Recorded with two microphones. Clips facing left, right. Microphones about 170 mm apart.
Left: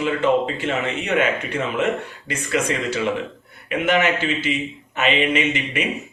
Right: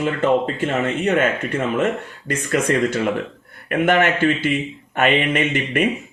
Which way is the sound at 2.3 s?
50° right (ahead or behind).